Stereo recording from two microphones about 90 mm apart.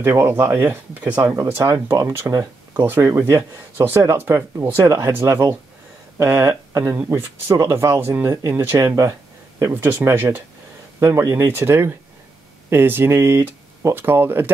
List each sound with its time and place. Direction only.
0.0 s speech: 25° right (ahead or behind)
1.2 s speech: 30° right (ahead or behind)
6.1 s speech: 30° right (ahead or behind)
11.0 s speech: 35° right (ahead or behind)